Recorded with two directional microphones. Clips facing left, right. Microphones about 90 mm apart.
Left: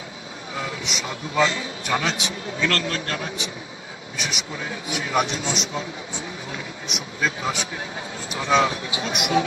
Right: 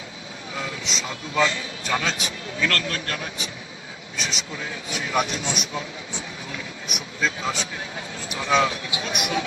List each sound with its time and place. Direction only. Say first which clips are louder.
0.5 s a man's voice: left 1 dB; 20° left (ahead or behind)
4.9 s a man's voice: left 1 dB; 20° left (ahead or behind)
8.3 s a man's voice: left 1 dB; 30° left (ahead or behind)